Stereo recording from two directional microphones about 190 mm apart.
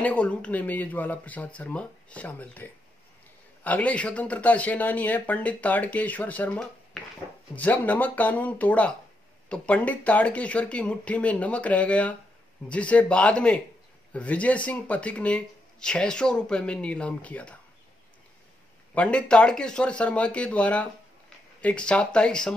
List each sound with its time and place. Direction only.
0.0 s speech: 5° left (ahead or behind)
18.9 s speech: 5° left (ahead or behind)